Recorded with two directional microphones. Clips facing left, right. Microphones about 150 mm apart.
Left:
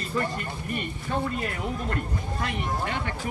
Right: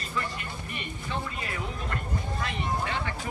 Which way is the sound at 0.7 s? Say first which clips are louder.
Left 5 dB; 45° left (ahead or behind).